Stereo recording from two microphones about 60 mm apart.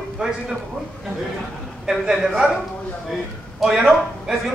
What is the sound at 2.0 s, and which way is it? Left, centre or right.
Speech, centre.